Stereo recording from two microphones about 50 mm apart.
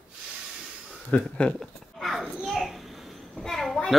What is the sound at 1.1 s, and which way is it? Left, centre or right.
Speech, left.